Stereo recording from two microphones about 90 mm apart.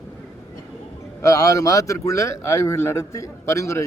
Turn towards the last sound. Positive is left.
turn(degrees=30)  # may be behind; listen again after turning